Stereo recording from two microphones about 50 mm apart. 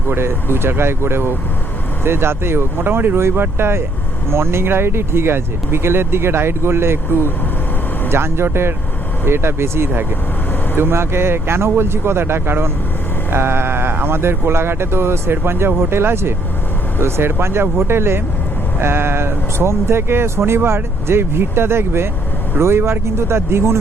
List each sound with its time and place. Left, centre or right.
0.1 s speech: right
3.2 s speech: right